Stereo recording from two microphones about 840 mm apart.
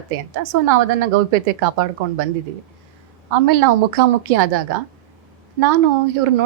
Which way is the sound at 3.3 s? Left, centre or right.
Right.